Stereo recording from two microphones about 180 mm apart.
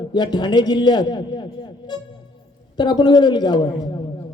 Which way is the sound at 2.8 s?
25° left (ahead or behind).